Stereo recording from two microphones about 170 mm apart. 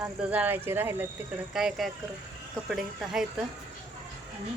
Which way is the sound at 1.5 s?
Centre (ahead or behind).